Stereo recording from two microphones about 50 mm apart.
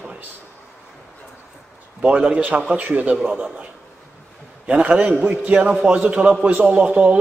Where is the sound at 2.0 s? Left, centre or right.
Right.